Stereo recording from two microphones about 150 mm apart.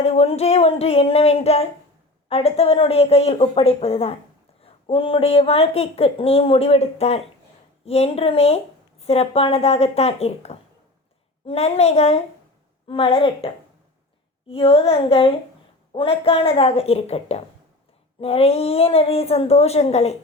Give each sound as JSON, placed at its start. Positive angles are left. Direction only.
{"t": 0.0, "sound": "a woman's voice", "side_deg": 40}
{"t": 14.5, "sound": "speech", "side_deg": 40}